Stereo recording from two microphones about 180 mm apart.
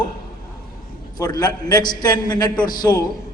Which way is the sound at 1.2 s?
20° left (ahead or behind).